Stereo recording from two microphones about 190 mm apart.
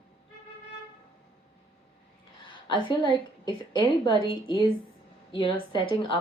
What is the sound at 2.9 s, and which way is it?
Speech, 25° left (ahead or behind).